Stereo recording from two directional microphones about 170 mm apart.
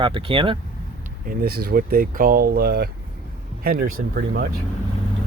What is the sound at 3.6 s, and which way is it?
Speech, 60° right (ahead or behind).